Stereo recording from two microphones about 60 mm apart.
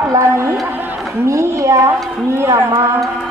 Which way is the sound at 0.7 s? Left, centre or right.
Right.